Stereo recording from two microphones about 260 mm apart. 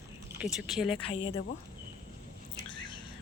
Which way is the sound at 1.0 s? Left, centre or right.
Left.